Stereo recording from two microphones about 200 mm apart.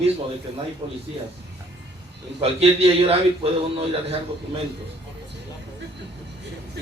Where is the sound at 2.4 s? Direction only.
30° right (ahead or behind).